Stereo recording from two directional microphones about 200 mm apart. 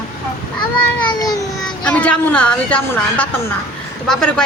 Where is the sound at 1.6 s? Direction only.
5° left (ahead or behind).